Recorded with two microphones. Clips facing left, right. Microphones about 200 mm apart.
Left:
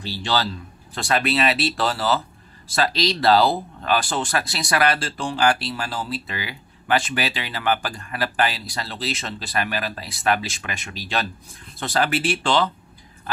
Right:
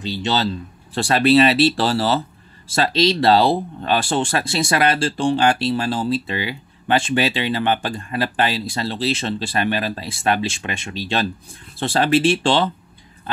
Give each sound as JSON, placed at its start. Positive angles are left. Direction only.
{"t": 0.0, "sound": "speech", "side_deg": -20}